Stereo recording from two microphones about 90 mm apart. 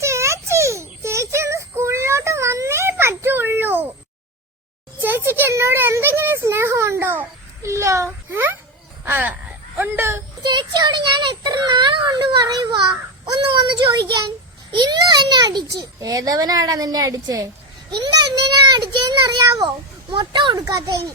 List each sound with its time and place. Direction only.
0.0 s child singing: 35° right (ahead or behind)
4.9 s a sound: 25° right (ahead or behind)
9.0 s speech: 25° right (ahead or behind)
10.4 s a child's voice: 55° right (ahead or behind)
17.9 s a sound: 50° right (ahead or behind)
18.9 s a child's voice: 50° right (ahead or behind)
20.1 s a child's voice: 60° right (ahead or behind); by 21.0 s 45° right (ahead or behind)